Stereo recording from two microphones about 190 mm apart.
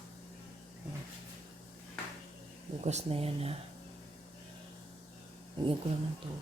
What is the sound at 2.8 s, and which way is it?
Speech, 35° right (ahead or behind).